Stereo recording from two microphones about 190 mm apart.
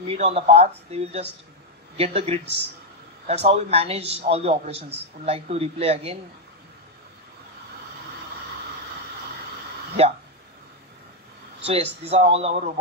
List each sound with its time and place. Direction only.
0.0 s a man's voice: 35° right (ahead or behind)
10.0 s a man's voice: 30° right (ahead or behind)
11.6 s a man's voice: 30° right (ahead or behind)